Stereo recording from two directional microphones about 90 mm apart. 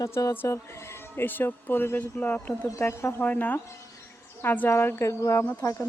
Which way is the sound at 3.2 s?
20° left (ahead or behind).